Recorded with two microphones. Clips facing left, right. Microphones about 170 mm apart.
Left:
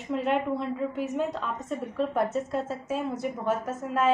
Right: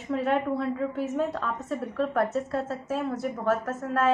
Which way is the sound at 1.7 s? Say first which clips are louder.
Even; centre (ahead or behind).